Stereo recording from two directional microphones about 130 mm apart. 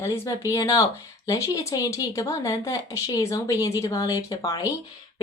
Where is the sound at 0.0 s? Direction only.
25° left (ahead or behind).